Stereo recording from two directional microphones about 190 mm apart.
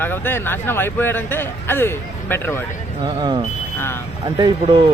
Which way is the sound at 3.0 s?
25° right (ahead or behind).